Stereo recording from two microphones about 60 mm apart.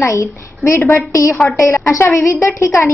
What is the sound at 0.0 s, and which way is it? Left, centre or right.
Speech, left.